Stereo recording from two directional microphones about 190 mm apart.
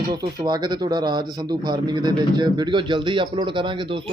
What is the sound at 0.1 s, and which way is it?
Speech, 20° right (ahead or behind).